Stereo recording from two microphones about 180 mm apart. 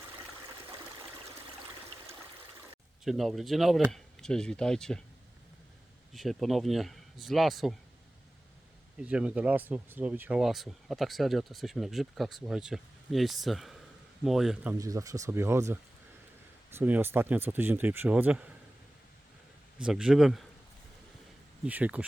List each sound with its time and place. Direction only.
3.0 s speech: centre (ahead or behind)
6.1 s speech: centre (ahead or behind)
9.0 s speech: 5° right (ahead or behind)
19.8 s speech: 5° right (ahead or behind)
21.6 s speech: 10° right (ahead or behind)